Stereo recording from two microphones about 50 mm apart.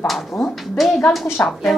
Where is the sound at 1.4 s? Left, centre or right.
Left.